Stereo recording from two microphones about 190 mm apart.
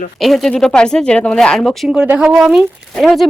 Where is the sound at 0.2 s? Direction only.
Centre (ahead or behind).